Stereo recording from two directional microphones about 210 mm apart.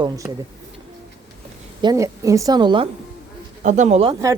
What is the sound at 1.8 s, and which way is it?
Speech, 15° right (ahead or behind).